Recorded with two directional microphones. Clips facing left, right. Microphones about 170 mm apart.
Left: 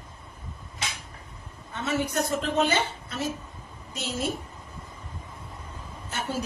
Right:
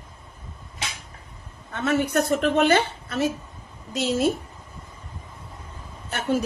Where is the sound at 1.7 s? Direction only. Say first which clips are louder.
Right 6 dB; 60° right (ahead or behind).